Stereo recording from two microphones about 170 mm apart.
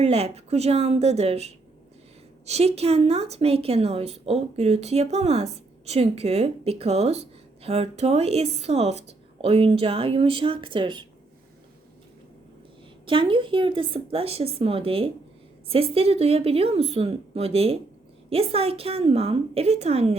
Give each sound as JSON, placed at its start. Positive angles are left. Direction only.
{"t": 0.0, "sound": "speech", "side_deg": -35}
{"t": 13.1, "sound": "speech", "side_deg": -30}